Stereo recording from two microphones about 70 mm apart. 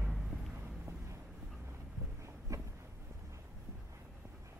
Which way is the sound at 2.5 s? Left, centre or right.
Right.